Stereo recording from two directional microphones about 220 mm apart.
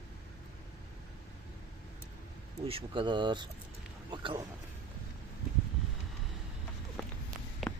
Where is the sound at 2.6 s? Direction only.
25° right (ahead or behind).